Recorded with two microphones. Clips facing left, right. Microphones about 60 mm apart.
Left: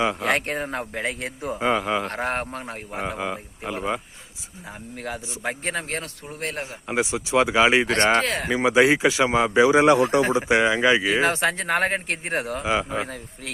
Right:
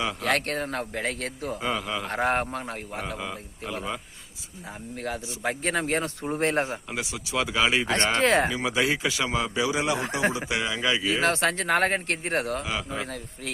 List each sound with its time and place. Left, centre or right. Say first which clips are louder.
0.0 s a man's voice: left 4 dB; left
2.0 s speech: right 1 dB; centre
3.0 s a man's voice: left 10 dB; left
5.5 s speech: right 1 dB; centre
5.9 s speech: right 5 dB; right
6.8 s a man's voice: left 8 dB; left
8.2 s speech: right 5 dB; right
8.4 s a man's voice: left 7 dB; left
9.7 s speech: left 10 dB; left
10.2 s a man's voice: left 7 dB; left
11.4 s speech: left 1 dB; centre
12.6 s a man's voice: left 7 dB; left